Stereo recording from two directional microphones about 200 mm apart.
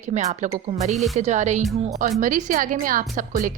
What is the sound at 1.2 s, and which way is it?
Speech, 35° right (ahead or behind).